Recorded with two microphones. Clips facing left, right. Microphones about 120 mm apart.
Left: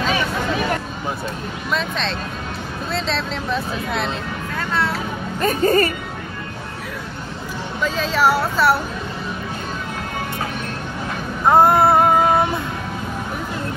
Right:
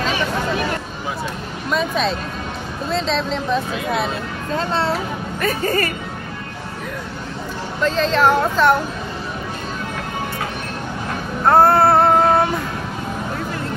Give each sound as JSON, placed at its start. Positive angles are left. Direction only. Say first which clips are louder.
{"t": 1.7, "sound": "speech", "louder": "right 4 dB", "side_deg": -5}
{"t": 4.5, "sound": "speech", "louder": "right 3 dB", "side_deg": -25}
{"t": 5.4, "sound": "speech", "louder": "left 4 dB", "side_deg": 35}
{"t": 7.8, "sound": "speech", "louder": "right 2 dB", "side_deg": 5}
{"t": 11.4, "sound": "a sound", "louder": "right 1 dB", "side_deg": 15}